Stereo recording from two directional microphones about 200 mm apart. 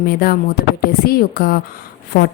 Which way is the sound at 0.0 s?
50° left (ahead or behind).